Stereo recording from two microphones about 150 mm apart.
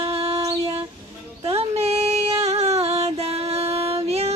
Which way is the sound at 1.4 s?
40° right (ahead or behind).